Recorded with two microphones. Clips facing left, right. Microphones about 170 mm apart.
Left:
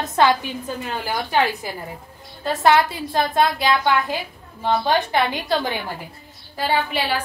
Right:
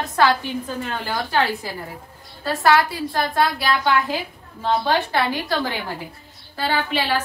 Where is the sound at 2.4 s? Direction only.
20° left (ahead or behind).